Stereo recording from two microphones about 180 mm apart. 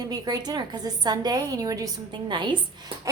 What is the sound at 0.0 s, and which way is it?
A woman's voice, 20° right (ahead or behind).